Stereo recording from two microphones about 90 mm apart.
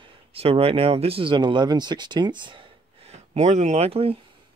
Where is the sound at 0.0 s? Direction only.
90° right; by 3.1 s 65° right (ahead or behind).